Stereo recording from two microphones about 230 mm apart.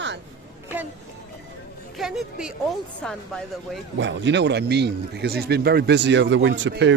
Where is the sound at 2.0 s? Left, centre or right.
Centre.